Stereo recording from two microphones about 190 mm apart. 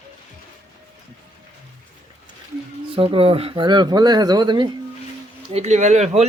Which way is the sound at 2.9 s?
30° right (ahead or behind).